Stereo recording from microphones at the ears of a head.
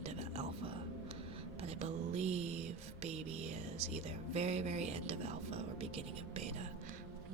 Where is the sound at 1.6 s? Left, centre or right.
Right.